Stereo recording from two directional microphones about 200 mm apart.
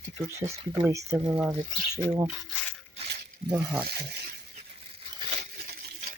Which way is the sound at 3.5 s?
5° right (ahead or behind).